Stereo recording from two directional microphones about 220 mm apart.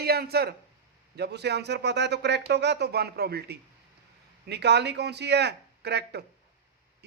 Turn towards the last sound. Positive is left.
turn(degrees=-50)  # may be behind; listen again after turning